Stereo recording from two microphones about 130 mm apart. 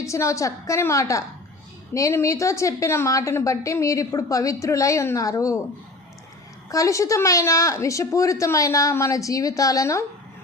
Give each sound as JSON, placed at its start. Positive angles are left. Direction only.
{"t": 0.0, "sound": "a woman's voice", "side_deg": 25}
{"t": 6.7, "sound": "a woman's voice", "side_deg": 25}